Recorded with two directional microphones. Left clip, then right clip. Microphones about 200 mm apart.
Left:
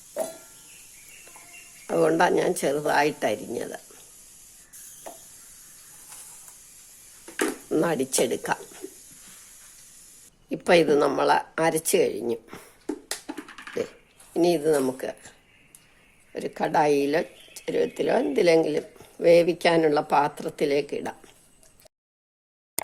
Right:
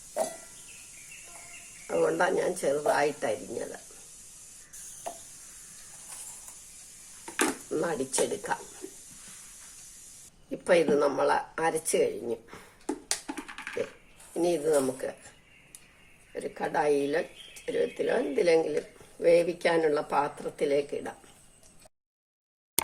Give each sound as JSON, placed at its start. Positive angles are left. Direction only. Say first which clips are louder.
{"t": 0.2, "sound": "a sound", "louder": "left 1 dB", "side_deg": 0}
{"t": 1.9, "sound": "speech", "louder": "left 5 dB", "side_deg": 45}
{"t": 7.7, "sound": "speech", "louder": "left 6 dB", "side_deg": 40}
{"t": 10.5, "sound": "speech", "louder": "left 4 dB", "side_deg": 45}
{"t": 14.3, "sound": "speech", "louder": "left 4 dB", "side_deg": 45}
{"t": 16.3, "sound": "speech", "louder": "left 6 dB", "side_deg": 45}